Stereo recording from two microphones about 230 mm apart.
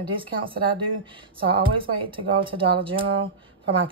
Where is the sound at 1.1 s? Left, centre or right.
Right.